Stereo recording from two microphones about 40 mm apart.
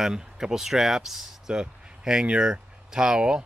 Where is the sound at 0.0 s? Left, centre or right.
Centre.